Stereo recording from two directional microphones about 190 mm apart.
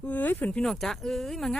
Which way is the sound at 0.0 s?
10° left (ahead or behind).